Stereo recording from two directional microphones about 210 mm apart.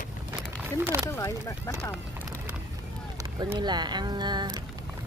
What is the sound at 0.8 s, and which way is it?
Speech, 10° right (ahead or behind).